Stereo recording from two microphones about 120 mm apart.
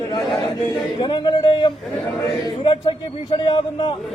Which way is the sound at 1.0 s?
40° left (ahead or behind).